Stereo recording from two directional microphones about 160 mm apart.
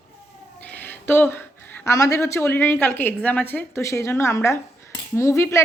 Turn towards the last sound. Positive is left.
turn(degrees=15)  # may be behind; listen again after turning